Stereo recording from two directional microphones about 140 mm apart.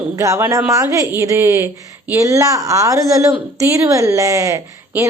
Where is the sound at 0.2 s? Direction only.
20° right (ahead or behind).